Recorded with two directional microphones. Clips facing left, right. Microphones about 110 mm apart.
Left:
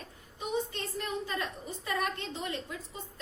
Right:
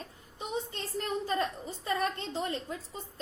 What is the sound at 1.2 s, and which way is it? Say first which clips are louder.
A woman's voice: right 4 dB; 30° right (ahead or behind).